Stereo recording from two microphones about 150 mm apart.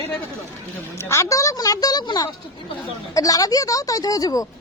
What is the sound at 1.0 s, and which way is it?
Speech, 20° left (ahead or behind).